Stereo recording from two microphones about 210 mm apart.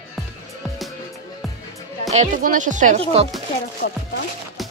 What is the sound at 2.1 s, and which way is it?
Speech, 35° right (ahead or behind).